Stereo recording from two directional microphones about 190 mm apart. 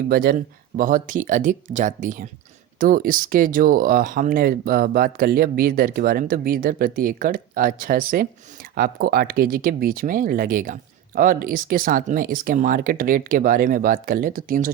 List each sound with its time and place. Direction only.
0.1 s speech: 50° right (ahead or behind)